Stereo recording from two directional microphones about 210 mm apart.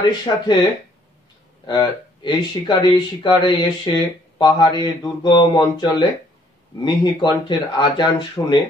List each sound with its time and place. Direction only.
0.2 s speech: 20° left (ahead or behind)
1.7 s speech: 20° left (ahead or behind)